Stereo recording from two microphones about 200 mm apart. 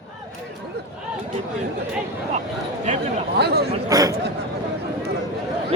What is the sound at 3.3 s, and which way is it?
Speech, 55° right (ahead or behind).